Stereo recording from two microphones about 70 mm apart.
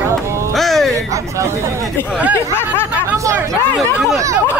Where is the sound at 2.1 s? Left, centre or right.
Right.